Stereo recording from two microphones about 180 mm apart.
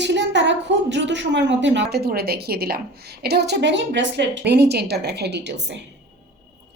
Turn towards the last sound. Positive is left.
turn(degrees=-70)  # may be behind; listen again after turning